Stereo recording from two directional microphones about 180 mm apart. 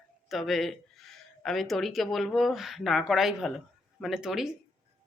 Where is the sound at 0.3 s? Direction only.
Centre (ahead or behind).